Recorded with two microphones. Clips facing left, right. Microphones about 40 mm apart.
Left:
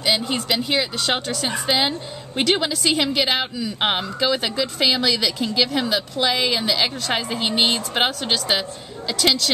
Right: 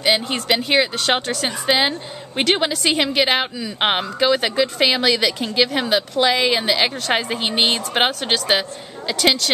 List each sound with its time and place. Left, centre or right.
0.3 s a woman's voice: right